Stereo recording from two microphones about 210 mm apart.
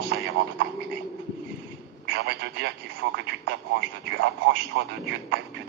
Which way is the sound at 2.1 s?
50° right (ahead or behind).